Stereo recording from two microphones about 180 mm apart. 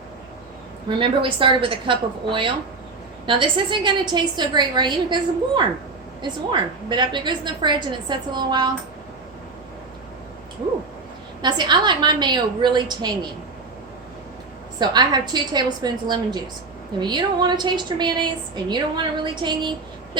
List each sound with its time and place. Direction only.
0.9 s a woman's voice: 30° right (ahead or behind)
11.4 s a woman's voice: 25° right (ahead or behind)
14.8 s a woman's voice: 25° right (ahead or behind)